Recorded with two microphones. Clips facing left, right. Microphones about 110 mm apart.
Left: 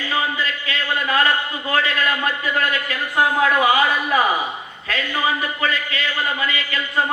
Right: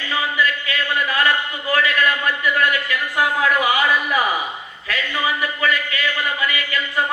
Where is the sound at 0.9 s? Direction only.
30° left (ahead or behind).